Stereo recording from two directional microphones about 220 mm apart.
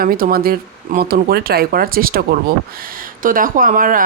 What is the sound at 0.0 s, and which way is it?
Speech, 40° right (ahead or behind).